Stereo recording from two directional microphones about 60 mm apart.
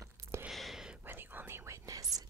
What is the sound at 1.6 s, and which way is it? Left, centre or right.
Whispering, right.